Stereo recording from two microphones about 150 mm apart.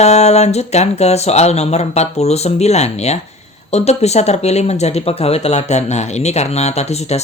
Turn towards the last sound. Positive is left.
turn(degrees=45)  # may be behind; listen again after turning